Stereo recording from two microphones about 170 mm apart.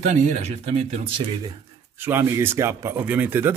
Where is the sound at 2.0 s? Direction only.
15° right (ahead or behind).